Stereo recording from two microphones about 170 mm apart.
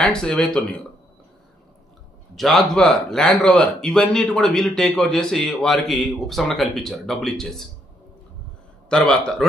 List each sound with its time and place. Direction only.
0.0 s speech: 5° left (ahead or behind)
2.3 s speech: centre (ahead or behind)
8.8 s speech: 5° left (ahead or behind)